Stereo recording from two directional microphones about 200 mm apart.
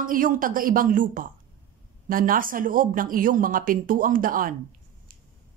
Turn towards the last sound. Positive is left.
turn(degrees=-45)  # may be behind; listen again after turning